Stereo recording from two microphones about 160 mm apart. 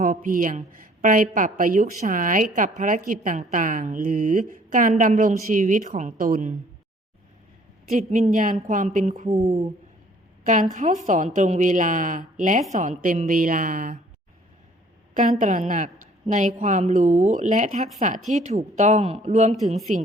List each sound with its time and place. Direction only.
0.0 s a woman's voice: 55° right (ahead or behind)
7.9 s a woman's voice: 50° right (ahead or behind)
15.1 s a woman's voice: 50° right (ahead or behind)